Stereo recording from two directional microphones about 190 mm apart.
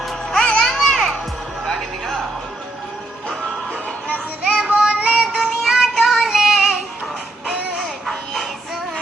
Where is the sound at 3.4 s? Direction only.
5° right (ahead or behind).